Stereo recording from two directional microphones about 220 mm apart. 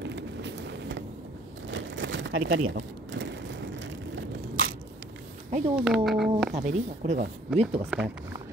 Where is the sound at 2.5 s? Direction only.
60° right (ahead or behind).